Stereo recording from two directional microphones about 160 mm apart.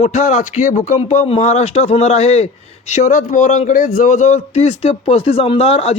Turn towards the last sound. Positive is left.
turn(degrees=40)  # may be behind; listen again after turning